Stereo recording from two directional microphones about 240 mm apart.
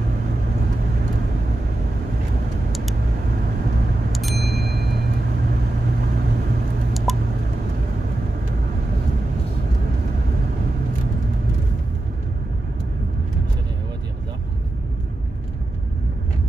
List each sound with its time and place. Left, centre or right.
2.7 s vehicle: centre
4.1 s chime: centre
4.4 s chime: right
7.1 s a sound: centre